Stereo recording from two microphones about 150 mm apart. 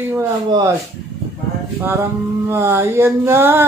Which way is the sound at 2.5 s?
15° right (ahead or behind).